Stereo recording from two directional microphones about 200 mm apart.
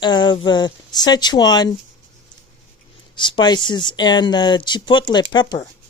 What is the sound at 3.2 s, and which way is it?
Speech, 25° left (ahead or behind).